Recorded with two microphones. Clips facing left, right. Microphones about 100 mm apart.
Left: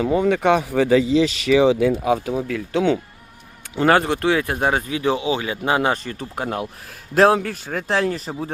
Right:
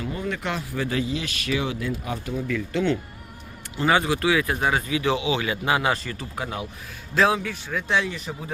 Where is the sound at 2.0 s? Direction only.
90° left.